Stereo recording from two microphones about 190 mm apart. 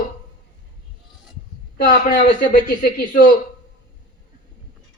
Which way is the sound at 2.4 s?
55° left (ahead or behind).